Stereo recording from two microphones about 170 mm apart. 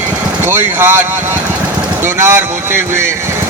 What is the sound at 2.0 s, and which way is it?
Speech, 15° right (ahead or behind).